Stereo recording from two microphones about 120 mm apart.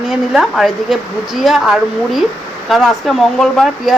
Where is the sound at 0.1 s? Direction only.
Centre (ahead or behind).